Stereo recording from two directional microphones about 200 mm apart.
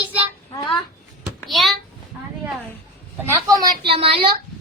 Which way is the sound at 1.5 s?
Centre (ahead or behind).